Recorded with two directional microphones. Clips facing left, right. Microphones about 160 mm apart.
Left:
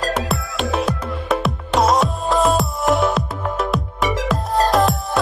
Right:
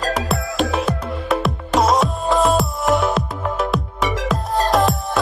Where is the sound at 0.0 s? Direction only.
Centre (ahead or behind).